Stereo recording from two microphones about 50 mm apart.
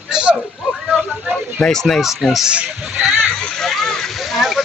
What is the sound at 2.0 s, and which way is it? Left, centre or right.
Speech, centre.